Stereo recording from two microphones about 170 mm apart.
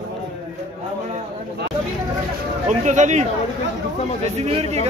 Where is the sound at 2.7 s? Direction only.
45° right (ahead or behind).